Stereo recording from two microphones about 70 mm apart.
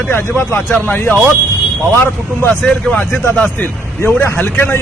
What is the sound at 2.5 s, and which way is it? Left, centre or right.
Speech, centre.